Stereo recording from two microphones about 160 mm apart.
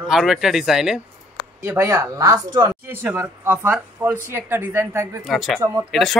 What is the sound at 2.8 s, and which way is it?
Speech, 15° right (ahead or behind).